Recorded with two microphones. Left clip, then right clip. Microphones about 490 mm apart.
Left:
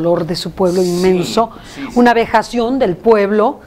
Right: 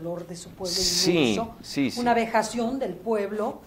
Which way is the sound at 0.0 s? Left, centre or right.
Left.